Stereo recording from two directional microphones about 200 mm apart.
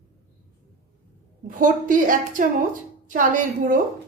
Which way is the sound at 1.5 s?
40° right (ahead or behind).